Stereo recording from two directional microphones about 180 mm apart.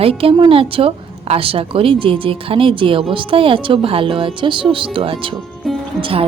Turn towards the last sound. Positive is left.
turn(degrees=-30)  # may be behind; listen again after turning